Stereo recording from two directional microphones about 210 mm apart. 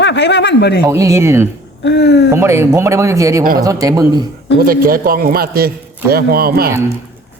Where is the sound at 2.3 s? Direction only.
15° right (ahead or behind).